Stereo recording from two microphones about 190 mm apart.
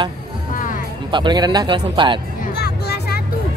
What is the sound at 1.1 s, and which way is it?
Speech, 25° right (ahead or behind).